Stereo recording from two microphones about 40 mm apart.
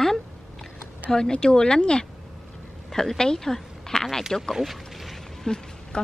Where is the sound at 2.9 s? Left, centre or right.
Centre.